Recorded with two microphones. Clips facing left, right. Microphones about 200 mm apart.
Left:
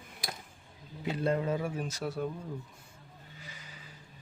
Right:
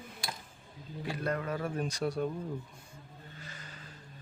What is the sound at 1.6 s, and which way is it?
Speech, 5° left (ahead or behind).